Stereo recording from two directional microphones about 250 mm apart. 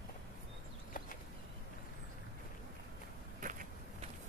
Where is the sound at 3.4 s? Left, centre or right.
Right.